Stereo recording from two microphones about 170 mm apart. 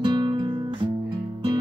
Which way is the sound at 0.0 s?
25° right (ahead or behind).